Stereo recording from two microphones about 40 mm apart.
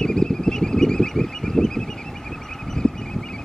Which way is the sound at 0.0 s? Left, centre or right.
Centre.